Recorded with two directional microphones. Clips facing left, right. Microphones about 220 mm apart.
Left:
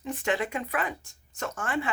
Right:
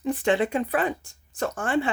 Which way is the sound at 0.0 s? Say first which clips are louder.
Right 6 dB; 30° right (ahead or behind).